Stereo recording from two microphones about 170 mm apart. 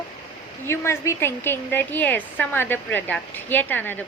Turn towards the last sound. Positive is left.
turn(degrees=10)  # may be behind; listen again after turning